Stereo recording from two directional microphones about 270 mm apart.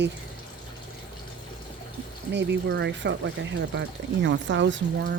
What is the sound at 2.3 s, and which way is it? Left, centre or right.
Speech, right.